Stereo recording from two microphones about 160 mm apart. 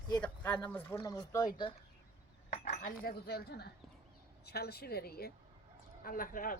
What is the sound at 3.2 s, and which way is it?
A woman's voice, 85° left.